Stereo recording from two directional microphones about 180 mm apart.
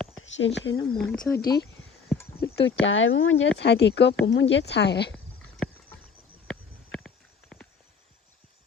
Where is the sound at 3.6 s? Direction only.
75° left (ahead or behind).